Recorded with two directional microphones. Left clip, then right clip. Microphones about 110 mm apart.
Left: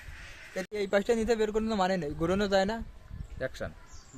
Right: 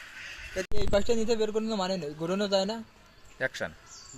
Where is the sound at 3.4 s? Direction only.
20° left (ahead or behind).